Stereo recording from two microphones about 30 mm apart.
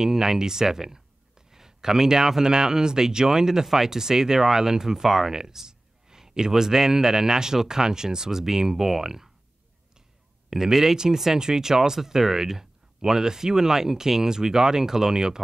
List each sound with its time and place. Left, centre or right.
0.0 s speech: centre
10.5 s speech: centre